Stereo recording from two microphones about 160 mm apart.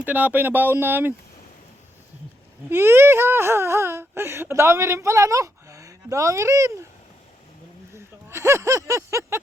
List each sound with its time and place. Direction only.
0.0 s speech: 10° right (ahead or behind)
2.6 s speech: 15° right (ahead or behind)
7.9 s speech: 15° right (ahead or behind)